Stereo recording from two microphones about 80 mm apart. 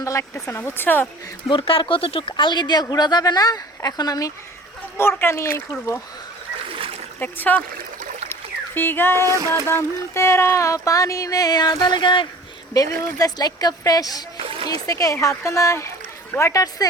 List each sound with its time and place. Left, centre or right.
0.0 s a sound: left
0.4 s speech: left
1.5 s speech: left
4.9 s speech: left
7.2 s speech: left
8.3 s a sound: left
9.2 s a sound: right
9.6 s speech: left
12.0 s speech: left
12.7 s speech: left